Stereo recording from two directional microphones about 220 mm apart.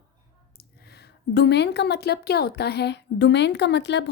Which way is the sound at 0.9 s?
50° left (ahead or behind).